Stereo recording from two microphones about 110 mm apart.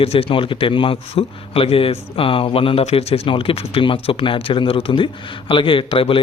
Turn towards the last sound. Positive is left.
turn(degrees=55)  # may be behind; listen again after turning